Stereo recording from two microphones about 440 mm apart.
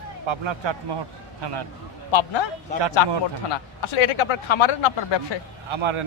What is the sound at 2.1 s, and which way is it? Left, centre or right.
Speech, left.